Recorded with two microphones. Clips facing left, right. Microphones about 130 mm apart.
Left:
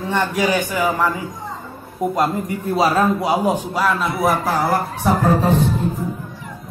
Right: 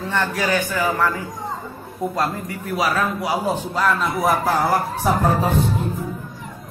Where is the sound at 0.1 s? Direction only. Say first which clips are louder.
Left 3 dB; 15° left (ahead or behind); by 5.1 s centre (ahead or behind).